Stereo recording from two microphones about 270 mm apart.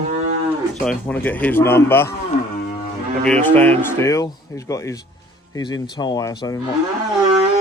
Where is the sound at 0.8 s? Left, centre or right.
Centre.